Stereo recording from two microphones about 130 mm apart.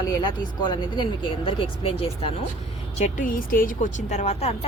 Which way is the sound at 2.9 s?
70° left (ahead or behind).